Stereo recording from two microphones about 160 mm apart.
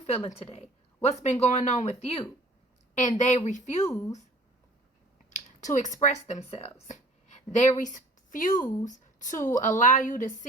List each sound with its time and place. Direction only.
0.0 s speech: 45° left (ahead or behind)
5.3 s speech: 50° left (ahead or behind)